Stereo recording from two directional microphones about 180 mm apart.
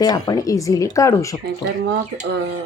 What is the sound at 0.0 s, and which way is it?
Speech, 20° left (ahead or behind).